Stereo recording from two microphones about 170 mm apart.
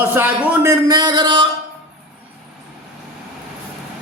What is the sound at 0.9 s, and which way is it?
Speech, 25° right (ahead or behind).